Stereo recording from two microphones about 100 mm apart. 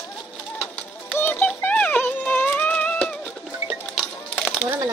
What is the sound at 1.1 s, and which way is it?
Music, 20° left (ahead or behind).